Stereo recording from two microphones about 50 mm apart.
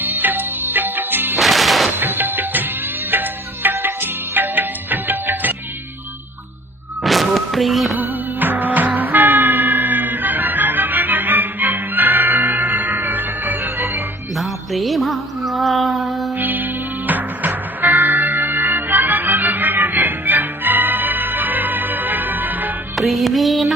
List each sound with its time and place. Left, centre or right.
0.0 s music: right
1.4 s music: centre
2.0 s music: right
7.0 s music: centre
7.9 s music: right
13.7 s music: right
14.3 s music: centre
16.4 s music: right
23.0 s music: centre